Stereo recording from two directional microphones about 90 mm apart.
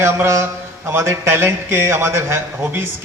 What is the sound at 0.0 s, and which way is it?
A man's voice, 30° right (ahead or behind).